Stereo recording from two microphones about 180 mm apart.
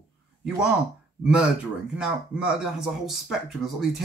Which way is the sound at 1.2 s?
5° right (ahead or behind).